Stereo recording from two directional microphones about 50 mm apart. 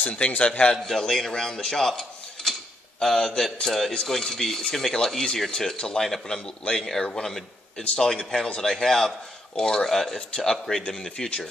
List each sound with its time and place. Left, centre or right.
0.0 s a man's voice: left
0.8 s a man's voice: centre
7.8 s a man's voice: left
8.1 s a man's voice: centre